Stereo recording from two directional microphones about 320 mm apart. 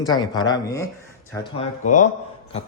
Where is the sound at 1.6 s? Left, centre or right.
Left.